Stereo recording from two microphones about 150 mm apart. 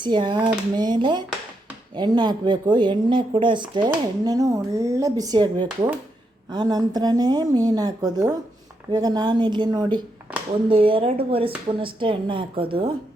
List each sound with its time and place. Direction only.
0.0 s speech: 30° right (ahead or behind)